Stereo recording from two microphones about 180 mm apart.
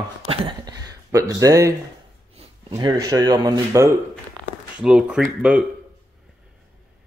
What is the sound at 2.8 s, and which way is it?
Speech, 20° right (ahead or behind).